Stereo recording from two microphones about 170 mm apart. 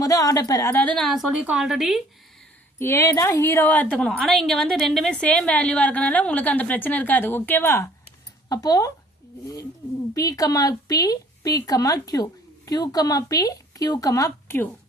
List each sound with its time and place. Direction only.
0.0 s a woman's voice: 20° left (ahead or behind); by 2.0 s centre (ahead or behind)
2.7 s a woman's voice: 15° left (ahead or behind)
10.2 s speech: 20° left (ahead or behind)